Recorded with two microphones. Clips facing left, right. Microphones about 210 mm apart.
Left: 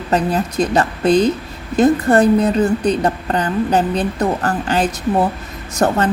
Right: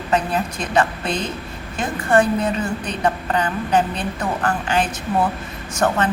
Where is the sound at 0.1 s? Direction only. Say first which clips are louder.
Left 3 dB; 40° left (ahead or behind).